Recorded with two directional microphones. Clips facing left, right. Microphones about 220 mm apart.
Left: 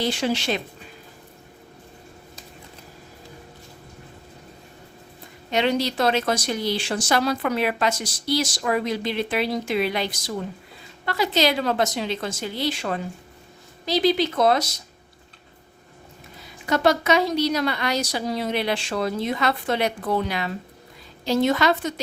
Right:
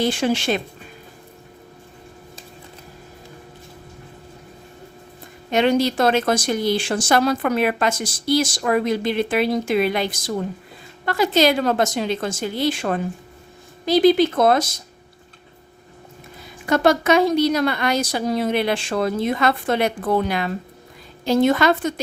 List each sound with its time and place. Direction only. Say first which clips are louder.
0.0 s speech: right 4 dB; 50° right (ahead or behind)
5.5 s speech: right 5 dB; 50° right (ahead or behind)
16.6 s speech: right 3 dB; 50° right (ahead or behind)